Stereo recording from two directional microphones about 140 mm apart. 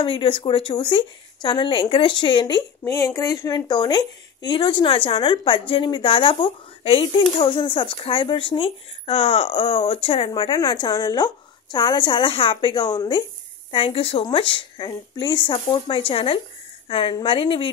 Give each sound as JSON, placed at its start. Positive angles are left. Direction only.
{"t": 0.0, "sound": "speech", "side_deg": 40}
{"t": 2.8, "sound": "speech", "side_deg": 20}